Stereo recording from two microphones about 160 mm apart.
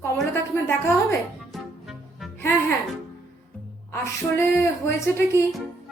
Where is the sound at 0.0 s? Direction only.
15° left (ahead or behind).